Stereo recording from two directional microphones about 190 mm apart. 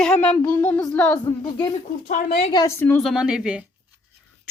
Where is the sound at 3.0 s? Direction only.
5° right (ahead or behind).